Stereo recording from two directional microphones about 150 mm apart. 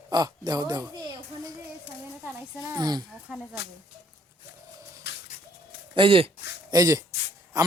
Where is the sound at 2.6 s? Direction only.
25° right (ahead or behind).